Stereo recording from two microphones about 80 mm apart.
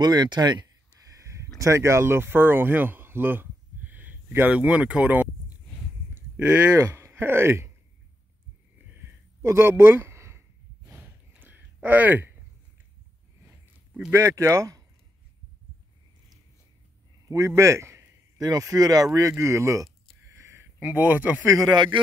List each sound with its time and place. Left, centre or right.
0.0 s speech: right
1.6 s speech: right; by 5.3 s centre
6.3 s speech: right
8.9 s a sound: right
14.1 s speech: right
17.3 s speech: right
18.4 s speech: right
20.3 s a sound: right
21.6 s speech: right